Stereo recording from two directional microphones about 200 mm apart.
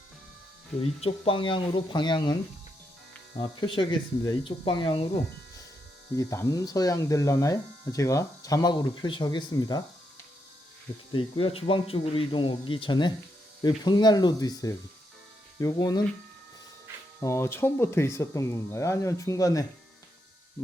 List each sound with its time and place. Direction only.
0.8 s speech: 30° left (ahead or behind)
3.4 s speech: 25° left (ahead or behind)
6.1 s speech: 15° left (ahead or behind)
11.1 s speech: 25° left (ahead or behind)
17.2 s speech: 15° left (ahead or behind)